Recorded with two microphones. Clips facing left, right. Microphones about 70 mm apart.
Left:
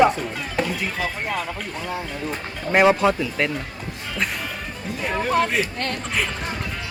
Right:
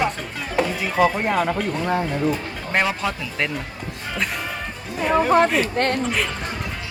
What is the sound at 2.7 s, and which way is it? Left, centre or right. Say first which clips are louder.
Speech: left 6 dB; centre.